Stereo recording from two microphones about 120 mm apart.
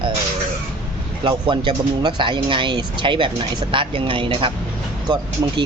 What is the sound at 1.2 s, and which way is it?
Speech, 40° right (ahead or behind).